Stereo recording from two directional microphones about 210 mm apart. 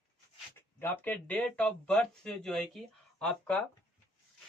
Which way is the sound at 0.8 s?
10° left (ahead or behind).